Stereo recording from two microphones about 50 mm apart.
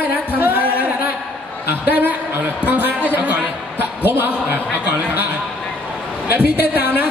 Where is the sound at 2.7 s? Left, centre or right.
Right.